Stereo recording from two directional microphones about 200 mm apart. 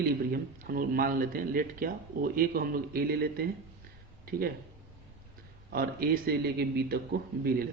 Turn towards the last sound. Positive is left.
turn(degrees=-50)  # may be behind; listen again after turning